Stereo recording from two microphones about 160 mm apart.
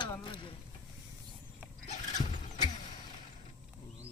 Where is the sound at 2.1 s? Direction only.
50° left (ahead or behind).